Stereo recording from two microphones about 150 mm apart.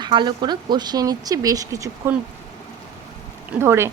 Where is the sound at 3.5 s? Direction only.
15° right (ahead or behind).